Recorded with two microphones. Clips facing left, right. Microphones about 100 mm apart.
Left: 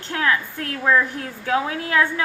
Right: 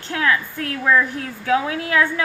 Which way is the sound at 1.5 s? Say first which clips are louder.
Right 2 dB; 30° left (ahead or behind).